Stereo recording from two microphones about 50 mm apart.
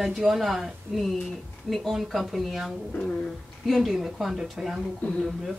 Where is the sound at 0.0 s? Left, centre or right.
Centre.